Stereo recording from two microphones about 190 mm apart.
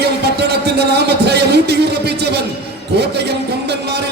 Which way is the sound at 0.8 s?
60° right (ahead or behind).